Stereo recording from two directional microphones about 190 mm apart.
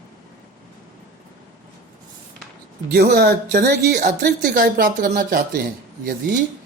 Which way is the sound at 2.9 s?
55° right (ahead or behind).